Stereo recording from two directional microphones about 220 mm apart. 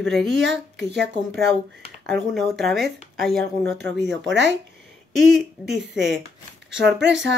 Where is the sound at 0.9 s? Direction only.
50° right (ahead or behind).